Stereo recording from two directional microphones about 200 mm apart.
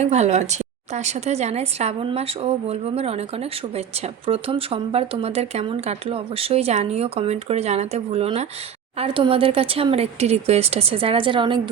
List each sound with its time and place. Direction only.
0.0 s a woman's voice: 35° right (ahead or behind)